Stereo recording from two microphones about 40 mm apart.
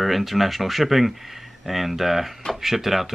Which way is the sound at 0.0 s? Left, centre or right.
Centre.